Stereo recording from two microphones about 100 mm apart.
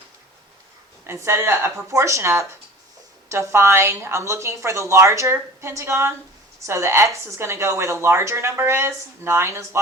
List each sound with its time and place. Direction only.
1.0 s a woman's voice: 25° right (ahead or behind)